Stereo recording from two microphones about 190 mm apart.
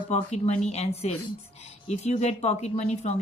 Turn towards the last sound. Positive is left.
turn(degrees=35)  # may be behind; listen again after turning